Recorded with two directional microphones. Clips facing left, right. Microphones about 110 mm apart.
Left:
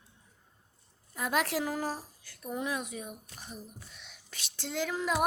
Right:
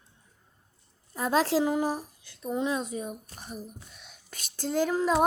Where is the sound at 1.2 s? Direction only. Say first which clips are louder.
Right 6 dB; 30° right (ahead or behind).